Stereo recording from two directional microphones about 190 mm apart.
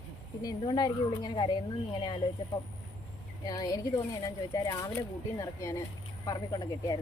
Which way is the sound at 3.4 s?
20° left (ahead or behind).